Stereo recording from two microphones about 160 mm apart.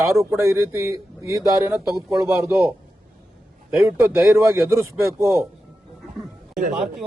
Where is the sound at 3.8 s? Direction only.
15° right (ahead or behind).